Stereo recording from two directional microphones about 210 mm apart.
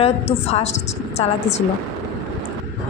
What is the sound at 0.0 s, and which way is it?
Speech, 30° left (ahead or behind).